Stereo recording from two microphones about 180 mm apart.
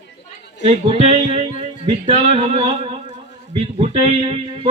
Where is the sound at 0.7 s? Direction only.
35° right (ahead or behind).